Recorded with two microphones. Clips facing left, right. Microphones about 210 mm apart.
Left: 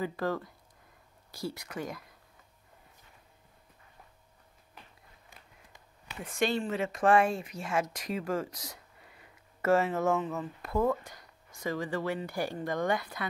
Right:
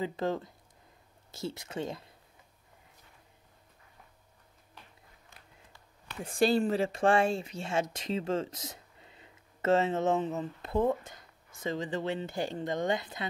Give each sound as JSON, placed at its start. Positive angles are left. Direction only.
{"t": 0.0, "sound": "speech", "side_deg": -20}
{"t": 6.2, "sound": "speech", "side_deg": -35}